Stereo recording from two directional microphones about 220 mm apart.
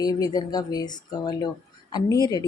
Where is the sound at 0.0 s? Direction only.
15° left (ahead or behind).